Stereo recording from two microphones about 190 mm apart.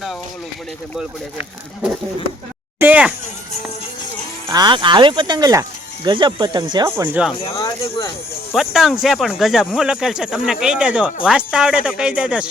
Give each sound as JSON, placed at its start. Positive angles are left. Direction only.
{"t": 2.7, "sound": "speech", "side_deg": -10}
{"t": 4.5, "sound": "speech", "side_deg": -25}
{"t": 6.9, "sound": "speech", "side_deg": -10}
{"t": 7.5, "sound": "speech", "side_deg": 15}
{"t": 8.5, "sound": "speech", "side_deg": 0}